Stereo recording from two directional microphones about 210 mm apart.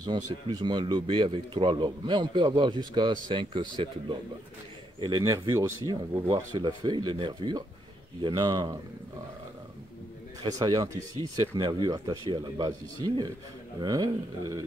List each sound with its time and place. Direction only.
0.0 s speech: 20° right (ahead or behind)
10.4 s speech: 20° right (ahead or behind)